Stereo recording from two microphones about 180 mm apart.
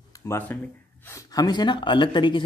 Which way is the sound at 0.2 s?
15° left (ahead or behind).